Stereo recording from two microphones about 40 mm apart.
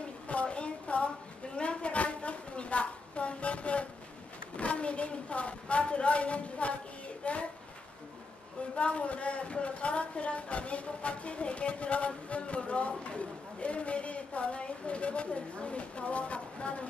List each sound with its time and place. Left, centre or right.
0.3 s a sound: left
4.6 s speech: left
8.7 s speech: left